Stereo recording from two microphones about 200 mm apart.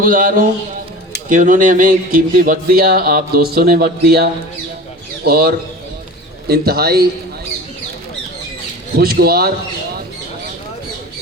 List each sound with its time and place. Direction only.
0.0 s speech: 45° right (ahead or behind)
9.0 s speech: 50° right (ahead or behind)